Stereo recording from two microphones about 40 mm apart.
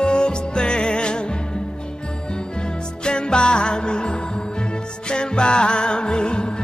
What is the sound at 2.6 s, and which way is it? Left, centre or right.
Music, left.